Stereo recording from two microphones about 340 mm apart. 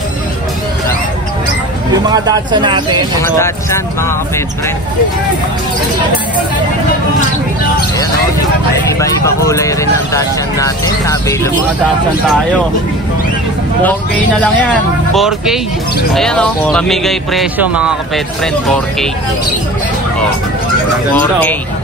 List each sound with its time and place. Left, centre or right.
1.9 s speech: centre
3.2 s speech: centre
9.0 s speech: centre
15.1 s speech: centre
21.1 s speech: centre